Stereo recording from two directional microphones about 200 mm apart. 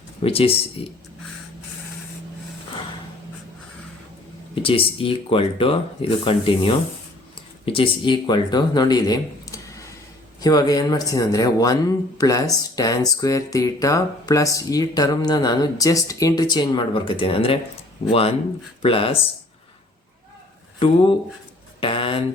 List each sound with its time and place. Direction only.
0.2 s speech: 30° left (ahead or behind)
4.6 s speech: 25° left (ahead or behind)
20.7 s speech: 25° left (ahead or behind)
21.8 s a sound: 25° left (ahead or behind)